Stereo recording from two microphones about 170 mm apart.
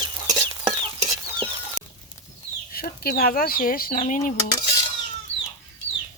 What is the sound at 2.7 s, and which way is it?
Speech, 60° left (ahead or behind).